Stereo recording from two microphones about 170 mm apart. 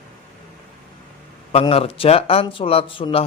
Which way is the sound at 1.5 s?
35° left (ahead or behind).